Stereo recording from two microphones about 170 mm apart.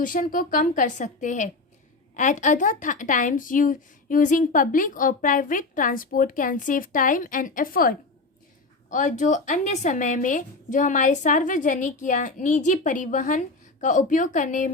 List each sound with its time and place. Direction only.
0.0 s a woman's voice: 50° left (ahead or behind)
8.9 s a woman's voice: 45° left (ahead or behind)